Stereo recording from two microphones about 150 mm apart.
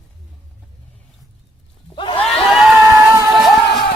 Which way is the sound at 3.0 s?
20° right (ahead or behind).